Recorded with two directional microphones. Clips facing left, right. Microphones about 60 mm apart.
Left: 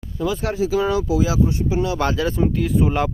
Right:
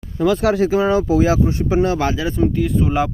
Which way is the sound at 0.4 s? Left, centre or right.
Right.